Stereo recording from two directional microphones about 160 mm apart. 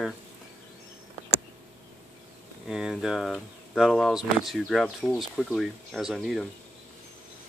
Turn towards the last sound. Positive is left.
turn(degrees=0)  # may be behind; listen again after turning